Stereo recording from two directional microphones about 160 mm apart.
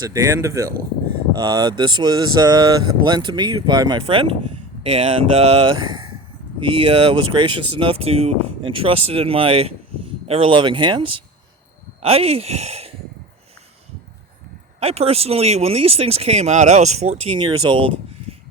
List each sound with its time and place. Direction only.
0.0 s speech: 20° right (ahead or behind); by 12.9 s 40° right (ahead or behind)
14.8 s speech: 40° right (ahead or behind)